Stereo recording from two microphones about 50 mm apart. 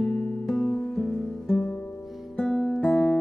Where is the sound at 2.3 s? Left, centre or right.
Centre.